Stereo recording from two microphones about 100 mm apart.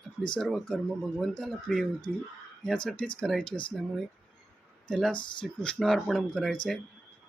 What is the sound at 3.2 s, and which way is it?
Speech, 5° left (ahead or behind).